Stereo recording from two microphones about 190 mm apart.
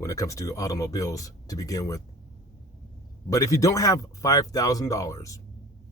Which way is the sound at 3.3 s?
15° left (ahead or behind).